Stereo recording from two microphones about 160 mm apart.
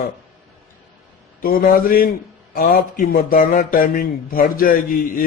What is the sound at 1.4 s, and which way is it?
Speech, 65° left (ahead or behind).